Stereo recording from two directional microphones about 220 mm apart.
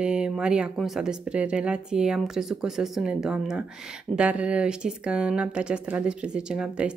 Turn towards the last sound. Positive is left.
turn(degrees=-5)  # may be behind; listen again after turning